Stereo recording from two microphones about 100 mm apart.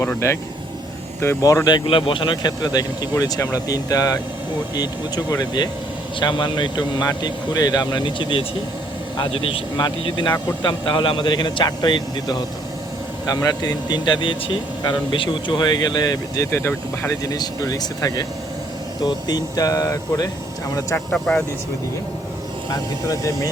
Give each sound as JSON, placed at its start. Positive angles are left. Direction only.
{"t": 0.0, "sound": "speech", "side_deg": 25}
{"t": 1.7, "sound": "speech", "side_deg": 60}
{"t": 9.3, "sound": "a man's voice", "side_deg": 65}
{"t": 10.0, "sound": "speech", "side_deg": 50}
{"t": 16.5, "sound": "speech", "side_deg": 20}
{"t": 17.2, "sound": "speech", "side_deg": 40}
{"t": 21.1, "sound": "speech", "side_deg": 10}
{"t": 22.7, "sound": "speech", "side_deg": 35}